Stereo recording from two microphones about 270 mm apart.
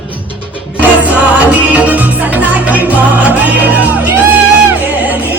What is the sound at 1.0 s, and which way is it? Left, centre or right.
Music, centre.